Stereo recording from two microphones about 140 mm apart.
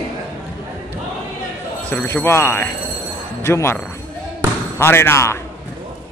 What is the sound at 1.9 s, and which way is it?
A man's voice, 10° left (ahead or behind).